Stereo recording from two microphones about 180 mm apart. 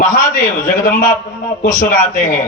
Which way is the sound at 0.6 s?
50° left (ahead or behind).